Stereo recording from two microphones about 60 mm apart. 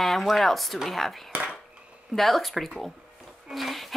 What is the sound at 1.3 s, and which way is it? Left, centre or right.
Dishes, centre.